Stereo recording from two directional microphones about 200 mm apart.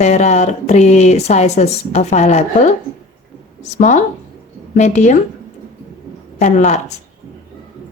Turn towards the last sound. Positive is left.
turn(degrees=35)  # may be behind; listen again after turning